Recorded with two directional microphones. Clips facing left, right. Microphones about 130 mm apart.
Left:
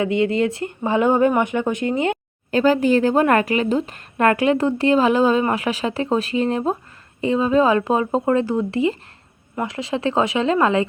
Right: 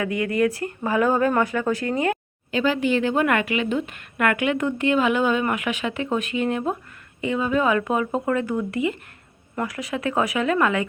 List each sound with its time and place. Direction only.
0.0 s speech: 25° left (ahead or behind)
2.5 s speech: 40° left (ahead or behind)